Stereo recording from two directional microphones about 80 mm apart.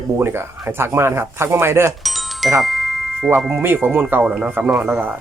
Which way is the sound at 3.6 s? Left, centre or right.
Right.